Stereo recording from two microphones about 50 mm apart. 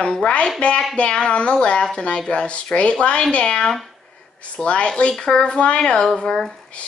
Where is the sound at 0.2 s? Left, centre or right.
Left.